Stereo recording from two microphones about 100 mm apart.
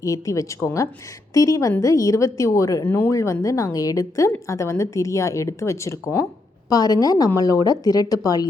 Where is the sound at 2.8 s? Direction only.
25° left (ahead or behind).